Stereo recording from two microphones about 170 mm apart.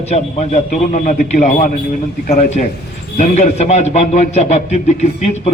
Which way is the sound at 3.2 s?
40° left (ahead or behind).